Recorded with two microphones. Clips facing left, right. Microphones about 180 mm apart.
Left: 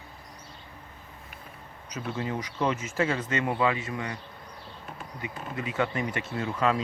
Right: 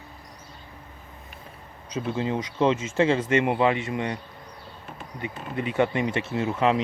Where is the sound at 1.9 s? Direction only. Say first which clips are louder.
Right 5 dB; 25° right (ahead or behind).